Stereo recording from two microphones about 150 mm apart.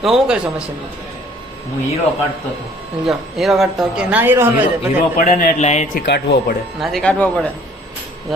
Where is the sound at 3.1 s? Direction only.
Centre (ahead or behind).